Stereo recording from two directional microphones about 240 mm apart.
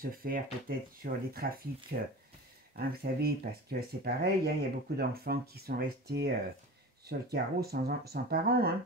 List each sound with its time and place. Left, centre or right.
0.0 s speech: right